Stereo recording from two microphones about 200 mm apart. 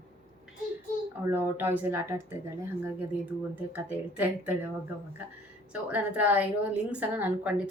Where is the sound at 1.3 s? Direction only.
10° right (ahead or behind).